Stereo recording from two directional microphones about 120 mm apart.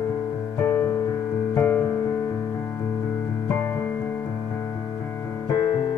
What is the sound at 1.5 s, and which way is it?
Music, 15° left (ahead or behind).